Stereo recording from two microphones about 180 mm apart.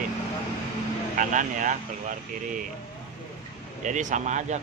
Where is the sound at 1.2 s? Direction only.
45° right (ahead or behind).